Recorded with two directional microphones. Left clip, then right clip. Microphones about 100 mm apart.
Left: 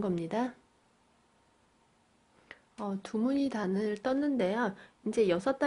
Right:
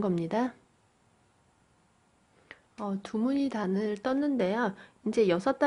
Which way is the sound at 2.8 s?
15° right (ahead or behind).